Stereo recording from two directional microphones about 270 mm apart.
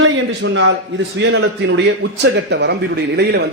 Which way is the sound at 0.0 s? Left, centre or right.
Right.